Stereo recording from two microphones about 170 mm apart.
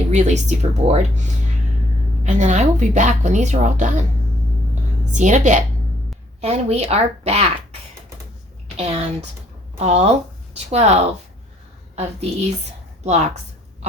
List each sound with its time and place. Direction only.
0.1 s a woman's voice: 45° right (ahead or behind)
4.7 s a sound: 45° right (ahead or behind)
6.4 s speech: 40° right (ahead or behind)
8.7 s speech: 40° right (ahead or behind)